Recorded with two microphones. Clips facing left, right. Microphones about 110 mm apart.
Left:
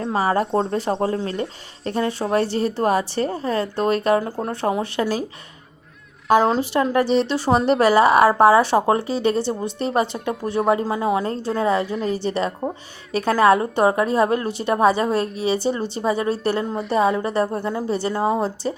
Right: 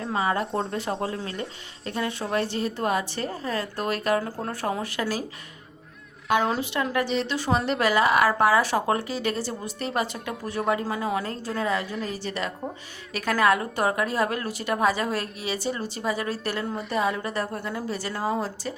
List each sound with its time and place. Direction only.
0.0 s a woman's voice: 35° left (ahead or behind)
6.2 s a woman's voice: 30° left (ahead or behind)